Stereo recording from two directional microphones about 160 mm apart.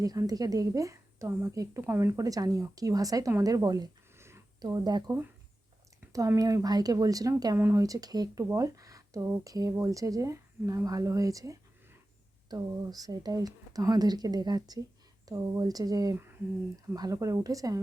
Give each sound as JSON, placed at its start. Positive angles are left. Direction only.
{"t": 0.0, "sound": "a woman's voice", "side_deg": -20}
{"t": 6.1, "sound": "a woman's voice", "side_deg": -20}